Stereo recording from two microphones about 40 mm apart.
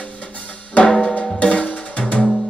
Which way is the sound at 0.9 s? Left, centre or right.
Centre.